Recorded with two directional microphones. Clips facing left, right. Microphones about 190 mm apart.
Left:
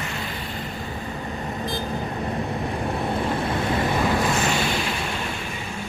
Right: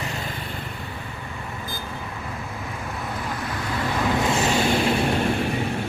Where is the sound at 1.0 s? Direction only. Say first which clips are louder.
Left 5 dB; 40° left (ahead or behind); by 4.1 s 20° left (ahead or behind).